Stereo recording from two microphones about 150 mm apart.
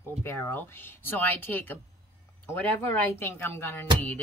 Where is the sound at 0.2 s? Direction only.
15° left (ahead or behind).